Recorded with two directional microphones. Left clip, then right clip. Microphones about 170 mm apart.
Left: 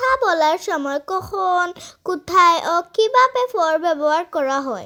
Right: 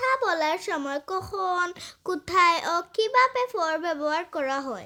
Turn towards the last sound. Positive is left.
turn(degrees=20)  # may be behind; listen again after turning